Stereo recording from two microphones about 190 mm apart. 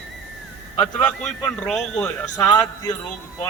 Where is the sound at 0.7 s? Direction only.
5° left (ahead or behind).